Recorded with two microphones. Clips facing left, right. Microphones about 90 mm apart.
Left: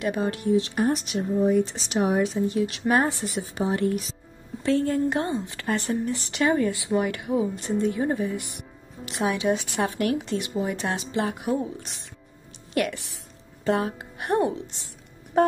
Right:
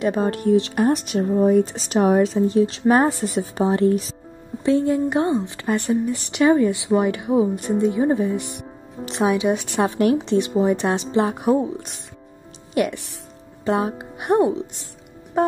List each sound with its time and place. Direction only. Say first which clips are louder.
0.2 s speech: right 5 dB; 45° right (ahead or behind)
0.6 s speech: right 5 dB; 65° right (ahead or behind); by 2.2 s 50° right (ahead or behind)
2.2 s a woman's voice: right 6 dB; 35° right (ahead or behind)
4.6 s speech: right 4 dB; 15° right (ahead or behind)
12.7 s speech: right 4 dB; 20° right (ahead or behind)
15.3 s music: right 1 dB; centre (ahead or behind)